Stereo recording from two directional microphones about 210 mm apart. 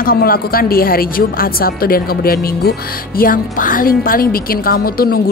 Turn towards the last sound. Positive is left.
turn(degrees=45)  # may be behind; listen again after turning